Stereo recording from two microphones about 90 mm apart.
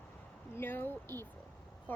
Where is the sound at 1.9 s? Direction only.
20° left (ahead or behind).